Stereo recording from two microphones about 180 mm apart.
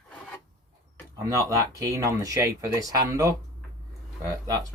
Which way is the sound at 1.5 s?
15° right (ahead or behind).